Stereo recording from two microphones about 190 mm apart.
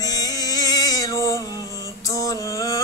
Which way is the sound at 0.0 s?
20° left (ahead or behind).